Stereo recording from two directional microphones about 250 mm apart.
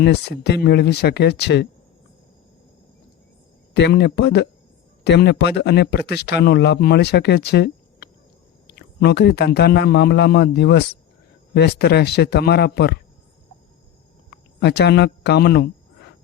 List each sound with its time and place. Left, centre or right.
0.0 s speech: left
3.8 s speech: left
14.6 s speech: left